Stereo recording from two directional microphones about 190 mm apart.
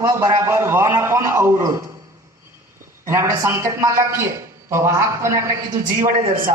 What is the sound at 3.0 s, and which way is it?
A man's voice, 15° right (ahead or behind).